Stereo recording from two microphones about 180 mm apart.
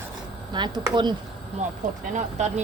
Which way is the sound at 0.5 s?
25° right (ahead or behind).